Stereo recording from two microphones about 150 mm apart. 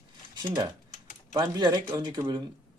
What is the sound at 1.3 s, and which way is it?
Speech, 25° right (ahead or behind).